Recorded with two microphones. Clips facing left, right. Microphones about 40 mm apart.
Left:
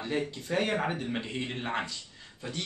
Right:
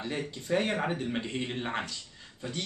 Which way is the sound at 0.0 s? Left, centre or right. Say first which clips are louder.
Left 3 dB; centre.